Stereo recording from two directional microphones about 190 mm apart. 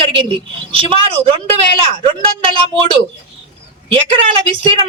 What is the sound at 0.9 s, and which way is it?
A woman's voice, 30° right (ahead or behind).